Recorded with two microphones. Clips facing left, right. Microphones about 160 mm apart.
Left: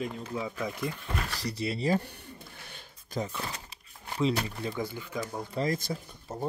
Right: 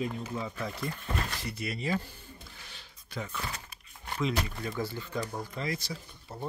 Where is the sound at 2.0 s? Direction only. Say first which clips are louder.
Left 3 dB; 65° left (ahead or behind).